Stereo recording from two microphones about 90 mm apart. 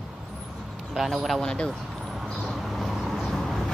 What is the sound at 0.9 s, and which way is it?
Speech, 5° right (ahead or behind).